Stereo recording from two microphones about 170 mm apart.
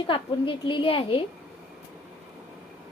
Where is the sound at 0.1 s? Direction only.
30° left (ahead or behind).